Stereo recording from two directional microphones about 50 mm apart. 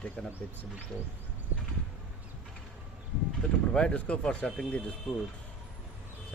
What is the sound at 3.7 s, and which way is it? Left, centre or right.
Speech, left.